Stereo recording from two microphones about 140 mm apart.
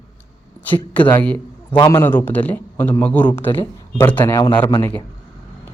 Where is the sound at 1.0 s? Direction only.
10° left (ahead or behind).